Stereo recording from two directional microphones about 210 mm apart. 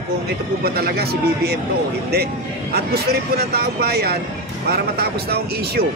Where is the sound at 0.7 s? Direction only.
45° right (ahead or behind).